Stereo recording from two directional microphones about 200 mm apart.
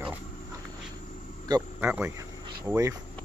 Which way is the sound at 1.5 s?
10° right (ahead or behind).